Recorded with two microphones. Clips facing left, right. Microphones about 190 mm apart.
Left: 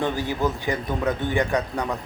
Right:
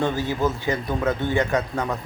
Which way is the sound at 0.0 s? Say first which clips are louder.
Right 1 dB; 15° left (ahead or behind).